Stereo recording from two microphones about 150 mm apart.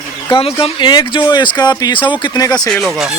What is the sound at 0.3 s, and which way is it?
Speech, 40° left (ahead or behind).